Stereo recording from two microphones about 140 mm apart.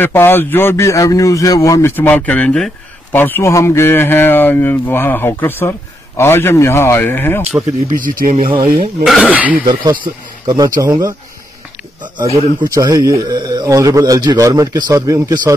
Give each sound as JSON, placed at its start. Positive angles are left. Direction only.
{"t": 0.0, "sound": "a man's voice", "side_deg": 15}
{"t": 7.9, "sound": "speech", "side_deg": -80}
{"t": 8.5, "sound": "speech", "side_deg": -40}
{"t": 9.0, "sound": "speech", "side_deg": -5}
{"t": 9.7, "sound": "a man's voice", "side_deg": -30}
{"t": 12.7, "sound": "a man's voice", "side_deg": -25}